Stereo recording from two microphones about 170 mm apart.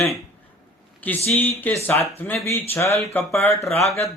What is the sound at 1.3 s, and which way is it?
Speech, 10° left (ahead or behind).